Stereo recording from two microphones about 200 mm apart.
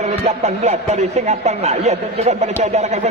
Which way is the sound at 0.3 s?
35° right (ahead or behind).